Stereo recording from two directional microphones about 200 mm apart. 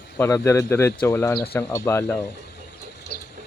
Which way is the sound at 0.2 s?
15° left (ahead or behind).